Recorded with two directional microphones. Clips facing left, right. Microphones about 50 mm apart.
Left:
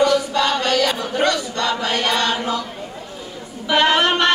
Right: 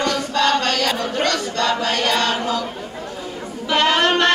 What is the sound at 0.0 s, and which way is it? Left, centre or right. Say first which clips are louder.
Choir: left 2 dB; centre.